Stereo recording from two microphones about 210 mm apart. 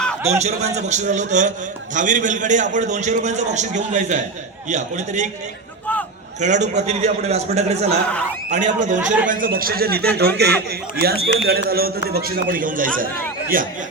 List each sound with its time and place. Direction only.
0.3 s a man's voice: 30° right (ahead or behind)
6.4 s a man's voice: 35° right (ahead or behind)